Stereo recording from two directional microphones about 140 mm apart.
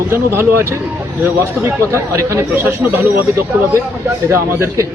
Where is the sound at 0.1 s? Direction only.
15° right (ahead or behind).